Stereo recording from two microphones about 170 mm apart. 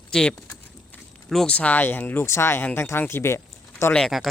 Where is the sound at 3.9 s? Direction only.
Centre (ahead or behind).